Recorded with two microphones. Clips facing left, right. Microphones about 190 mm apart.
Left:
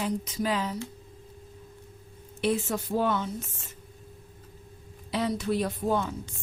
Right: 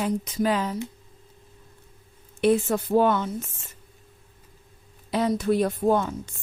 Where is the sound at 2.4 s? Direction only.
55° right (ahead or behind).